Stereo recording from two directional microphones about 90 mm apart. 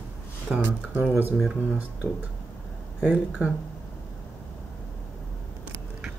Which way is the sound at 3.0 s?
15° right (ahead or behind).